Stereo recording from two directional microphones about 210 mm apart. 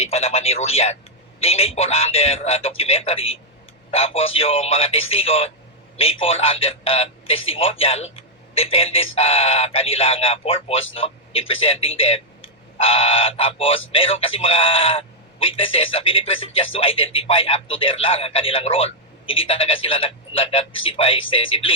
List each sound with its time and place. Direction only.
0.0 s a man's voice: 30° left (ahead or behind)